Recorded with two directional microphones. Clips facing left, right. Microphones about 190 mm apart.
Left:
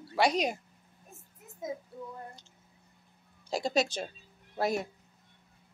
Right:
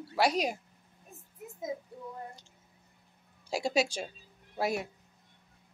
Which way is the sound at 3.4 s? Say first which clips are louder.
Even; 10° right (ahead or behind).